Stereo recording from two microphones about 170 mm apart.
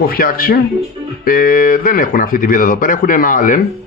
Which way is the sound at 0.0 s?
60° left (ahead or behind).